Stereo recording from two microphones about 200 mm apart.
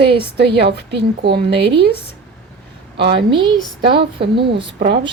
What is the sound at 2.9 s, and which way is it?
Speech, 55° right (ahead or behind).